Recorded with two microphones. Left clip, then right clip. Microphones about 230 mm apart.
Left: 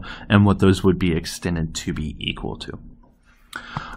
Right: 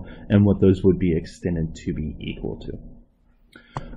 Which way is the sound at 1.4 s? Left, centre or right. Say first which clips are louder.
Even; left.